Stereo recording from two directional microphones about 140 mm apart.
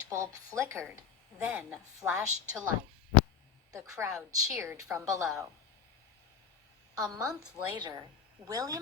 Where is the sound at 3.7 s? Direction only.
25° right (ahead or behind).